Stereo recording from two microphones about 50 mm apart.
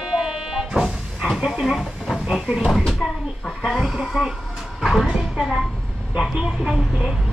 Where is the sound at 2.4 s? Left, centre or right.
Centre.